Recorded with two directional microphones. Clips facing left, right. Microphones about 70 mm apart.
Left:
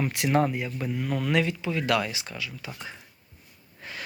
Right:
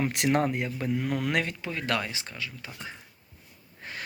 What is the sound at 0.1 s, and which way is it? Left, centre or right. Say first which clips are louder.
Speech: left 1 dB; right.